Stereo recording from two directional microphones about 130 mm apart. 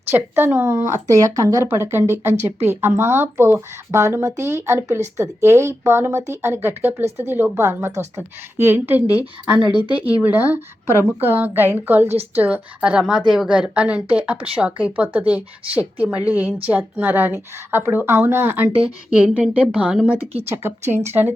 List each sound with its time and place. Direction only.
0.1 s speech: 15° right (ahead or behind)